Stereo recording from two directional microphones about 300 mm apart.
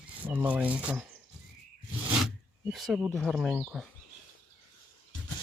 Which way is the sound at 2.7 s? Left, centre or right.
Centre.